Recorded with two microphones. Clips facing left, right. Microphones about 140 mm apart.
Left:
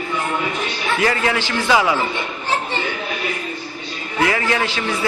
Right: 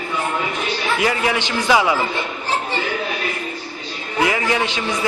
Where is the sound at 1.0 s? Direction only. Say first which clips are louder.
Left 2 dB; 15° right (ahead or behind).